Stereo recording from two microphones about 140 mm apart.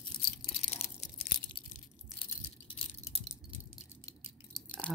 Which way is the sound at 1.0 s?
55° left (ahead or behind).